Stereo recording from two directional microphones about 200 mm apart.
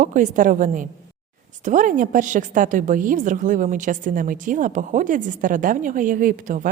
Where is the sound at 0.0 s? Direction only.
40° right (ahead or behind).